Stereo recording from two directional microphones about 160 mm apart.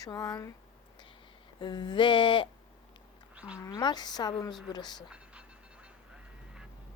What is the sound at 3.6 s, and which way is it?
Speech, 25° left (ahead or behind).